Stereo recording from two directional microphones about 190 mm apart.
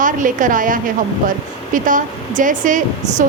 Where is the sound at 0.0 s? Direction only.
45° right (ahead or behind).